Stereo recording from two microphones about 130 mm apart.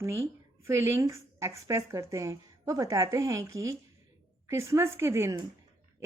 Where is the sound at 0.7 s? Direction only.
20° right (ahead or behind).